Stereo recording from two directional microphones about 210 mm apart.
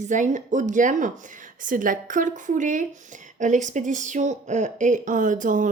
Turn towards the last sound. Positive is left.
turn(degrees=-40)  # may be behind; listen again after turning